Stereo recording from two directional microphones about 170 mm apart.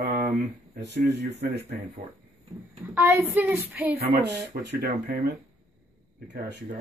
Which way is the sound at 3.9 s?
70° right (ahead or behind).